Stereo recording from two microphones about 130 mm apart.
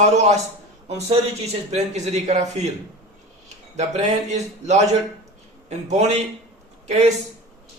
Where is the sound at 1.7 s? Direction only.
60° right (ahead or behind).